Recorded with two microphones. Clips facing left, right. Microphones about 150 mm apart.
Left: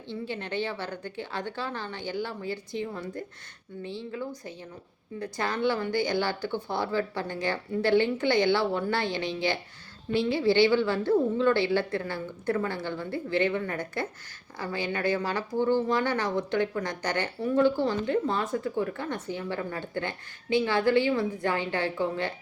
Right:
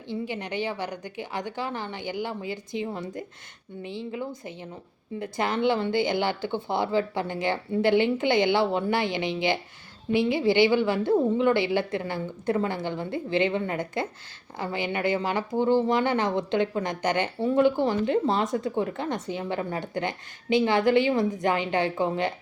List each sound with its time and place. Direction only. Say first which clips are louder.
0.1 s a woman's voice: right 2 dB; 15° right (ahead or behind)